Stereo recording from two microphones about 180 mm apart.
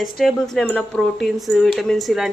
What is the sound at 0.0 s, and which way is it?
A woman's voice, centre (ahead or behind).